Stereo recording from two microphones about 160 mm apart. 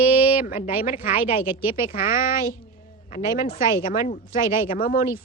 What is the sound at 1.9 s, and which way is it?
A woman's voice, 60° left (ahead or behind).